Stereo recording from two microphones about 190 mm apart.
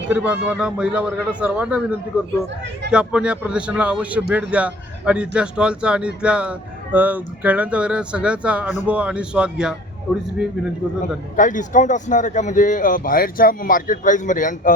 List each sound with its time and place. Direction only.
0.1 s a man's voice: 5° right (ahead or behind)
11.3 s speech: 45° left (ahead or behind)